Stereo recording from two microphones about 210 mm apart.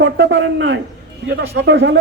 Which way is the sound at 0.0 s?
60° right (ahead or behind).